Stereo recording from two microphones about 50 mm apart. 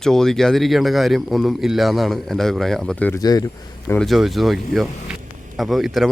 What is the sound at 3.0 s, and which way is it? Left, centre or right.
Speech, left.